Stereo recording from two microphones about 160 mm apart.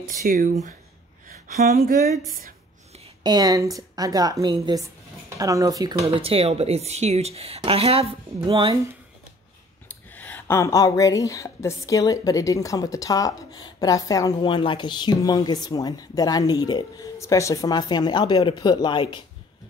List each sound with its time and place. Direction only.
0.0 s speech: 60° right (ahead or behind)
1.6 s speech: 45° right (ahead or behind)
3.3 s a woman's voice: 25° right (ahead or behind)
6.0 s speech: 35° right (ahead or behind)
9.8 s speech: 10° left (ahead or behind); by 19.2 s 30° left (ahead or behind)